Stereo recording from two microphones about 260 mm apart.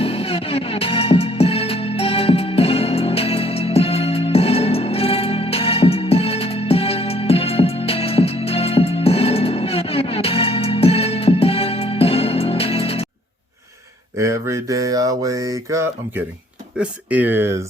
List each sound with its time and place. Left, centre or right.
0.0 s music: left
14.2 s a sound: centre
16.7 s speech: centre